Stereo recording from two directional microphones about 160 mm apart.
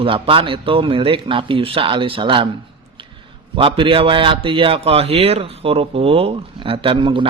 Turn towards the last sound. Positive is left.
turn(degrees=-30)  # may be behind; listen again after turning